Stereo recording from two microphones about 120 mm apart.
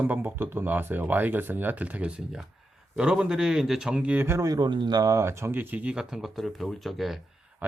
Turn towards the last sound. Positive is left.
turn(degrees=0)  # may be behind; listen again after turning